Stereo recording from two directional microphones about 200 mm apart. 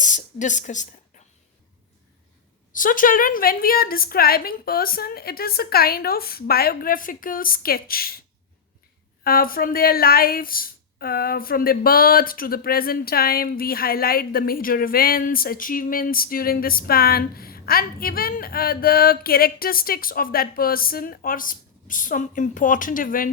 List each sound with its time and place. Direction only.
0.0 s speech: 40° left (ahead or behind)
2.7 s speech: 40° left (ahead or behind)
9.2 s speech: 45° left (ahead or behind)